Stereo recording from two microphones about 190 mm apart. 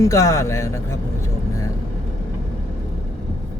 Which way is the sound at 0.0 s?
15° left (ahead or behind).